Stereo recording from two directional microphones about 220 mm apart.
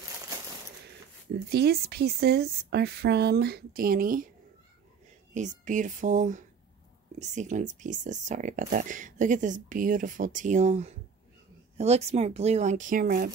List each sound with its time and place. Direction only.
1.5 s speech: 45° right (ahead or behind)
5.3 s speech: 35° right (ahead or behind)